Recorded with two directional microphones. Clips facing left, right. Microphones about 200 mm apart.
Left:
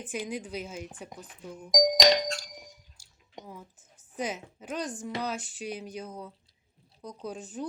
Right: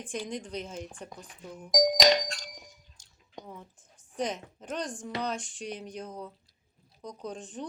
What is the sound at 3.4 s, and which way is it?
Speech, 5° left (ahead or behind).